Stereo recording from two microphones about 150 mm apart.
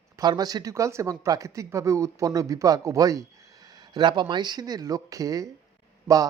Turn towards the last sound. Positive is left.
turn(degrees=-20)  # may be behind; listen again after turning